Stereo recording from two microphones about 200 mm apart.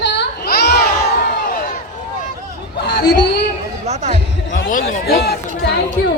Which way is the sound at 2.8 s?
55° left (ahead or behind).